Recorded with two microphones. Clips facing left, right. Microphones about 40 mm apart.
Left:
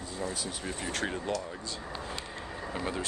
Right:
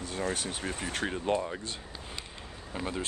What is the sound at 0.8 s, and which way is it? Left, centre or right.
Speech, centre.